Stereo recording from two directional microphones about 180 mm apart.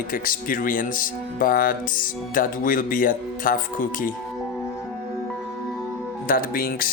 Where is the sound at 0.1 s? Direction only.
50° left (ahead or behind).